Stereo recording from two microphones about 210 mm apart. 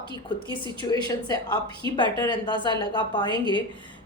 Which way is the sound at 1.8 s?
20° right (ahead or behind).